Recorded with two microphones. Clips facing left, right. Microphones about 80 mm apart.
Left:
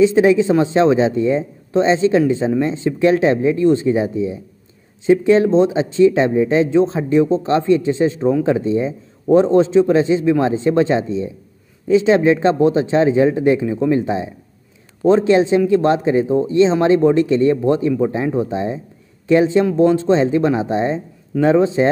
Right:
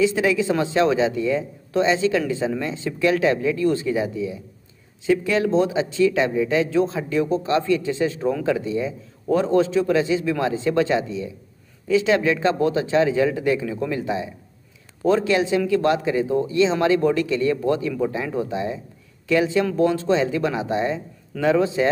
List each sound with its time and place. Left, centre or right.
0.0 s speech: left